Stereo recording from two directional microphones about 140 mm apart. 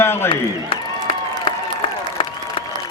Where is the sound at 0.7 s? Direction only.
40° left (ahead or behind).